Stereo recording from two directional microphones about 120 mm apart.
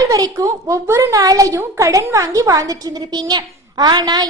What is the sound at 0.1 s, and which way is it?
A woman's voice, 25° right (ahead or behind).